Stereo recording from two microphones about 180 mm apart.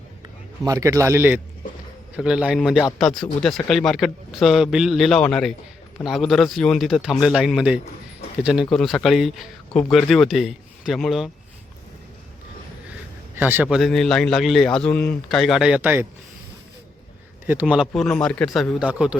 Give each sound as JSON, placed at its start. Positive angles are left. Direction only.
{"t": 0.6, "sound": "a man's voice", "side_deg": -20}
{"t": 13.3, "sound": "a man's voice", "side_deg": -10}
{"t": 17.4, "sound": "a man's voice", "side_deg": -10}